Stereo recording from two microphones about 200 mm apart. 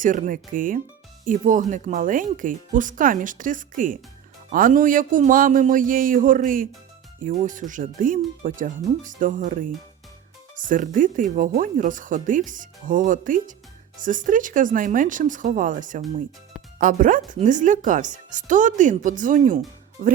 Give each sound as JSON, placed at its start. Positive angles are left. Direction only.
{"t": 0.0, "sound": "speech", "side_deg": -40}